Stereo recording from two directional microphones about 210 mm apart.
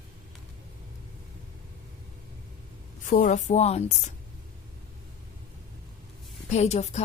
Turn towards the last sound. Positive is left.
turn(degrees=30)  # may be behind; listen again after turning